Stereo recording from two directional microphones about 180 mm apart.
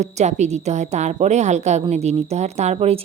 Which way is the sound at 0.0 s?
40° right (ahead or behind).